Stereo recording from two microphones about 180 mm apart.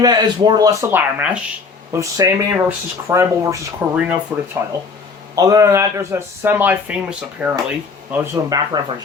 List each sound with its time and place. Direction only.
0.0 s speech: 25° right (ahead or behind)
8.4 s speech: 20° right (ahead or behind)